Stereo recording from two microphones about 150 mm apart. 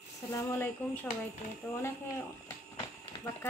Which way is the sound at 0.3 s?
15° left (ahead or behind).